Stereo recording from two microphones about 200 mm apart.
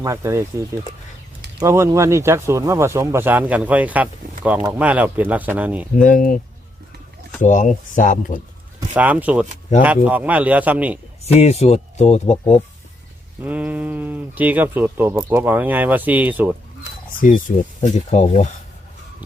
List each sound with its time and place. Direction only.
0.0 s speech: 15° right (ahead or behind)
1.5 s speech: 15° right (ahead or behind)
6.0 s speech: 40° left (ahead or behind)
7.4 s speech: 40° left (ahead or behind)
9.0 s speech: 10° right (ahead or behind)
11.3 s speech: 30° left (ahead or behind)
13.4 s speech: 10° right (ahead or behind)
17.2 s speech: 40° left (ahead or behind)